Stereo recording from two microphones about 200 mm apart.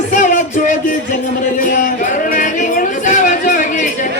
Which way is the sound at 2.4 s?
40° left (ahead or behind).